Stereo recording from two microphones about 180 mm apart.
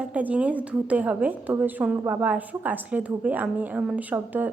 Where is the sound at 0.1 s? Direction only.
10° right (ahead or behind).